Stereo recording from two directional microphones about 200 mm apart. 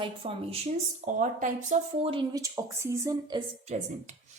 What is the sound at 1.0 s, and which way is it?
Speech, 40° right (ahead or behind).